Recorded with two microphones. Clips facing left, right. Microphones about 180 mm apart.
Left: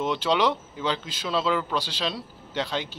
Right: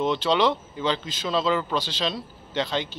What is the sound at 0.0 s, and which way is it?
Speech, 10° left (ahead or behind).